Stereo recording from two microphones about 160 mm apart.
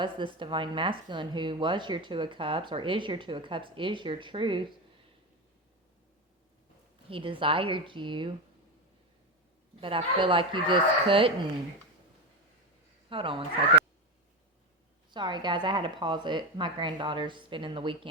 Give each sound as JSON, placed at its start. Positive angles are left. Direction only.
{"t": 0.3, "sound": "speech", "side_deg": -30}
{"t": 7.1, "sound": "speech", "side_deg": -35}
{"t": 9.8, "sound": "speech", "side_deg": -30}
{"t": 13.1, "sound": "speech", "side_deg": -35}
{"t": 15.1, "sound": "speech", "side_deg": -30}